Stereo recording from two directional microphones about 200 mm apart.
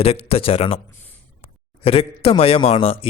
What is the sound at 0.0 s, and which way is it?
Speech, 30° left (ahead or behind).